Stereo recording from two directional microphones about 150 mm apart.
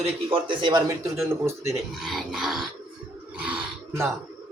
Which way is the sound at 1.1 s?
15° right (ahead or behind).